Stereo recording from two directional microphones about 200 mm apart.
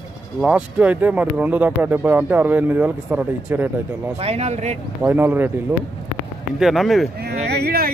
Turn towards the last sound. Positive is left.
turn(degrees=-50)  # may be behind; listen again after turning